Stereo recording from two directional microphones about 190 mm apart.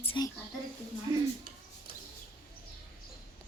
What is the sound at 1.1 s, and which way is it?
Speech, 20° right (ahead or behind).